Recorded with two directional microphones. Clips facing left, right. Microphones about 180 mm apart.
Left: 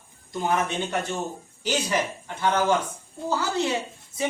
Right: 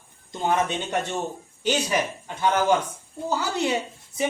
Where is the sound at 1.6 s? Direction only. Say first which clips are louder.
Right 2 dB; 15° right (ahead or behind).